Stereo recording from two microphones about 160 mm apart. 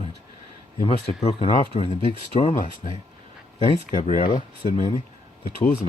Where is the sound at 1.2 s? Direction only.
35° left (ahead or behind).